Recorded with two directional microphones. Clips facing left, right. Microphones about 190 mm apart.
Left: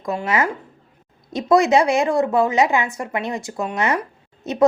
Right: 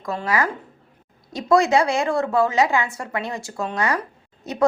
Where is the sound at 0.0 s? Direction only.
20° left (ahead or behind).